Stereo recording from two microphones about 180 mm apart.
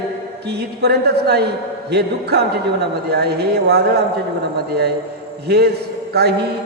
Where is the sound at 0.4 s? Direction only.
65° right (ahead or behind).